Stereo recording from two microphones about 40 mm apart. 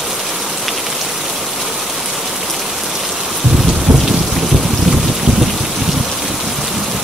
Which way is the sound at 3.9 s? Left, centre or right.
Centre.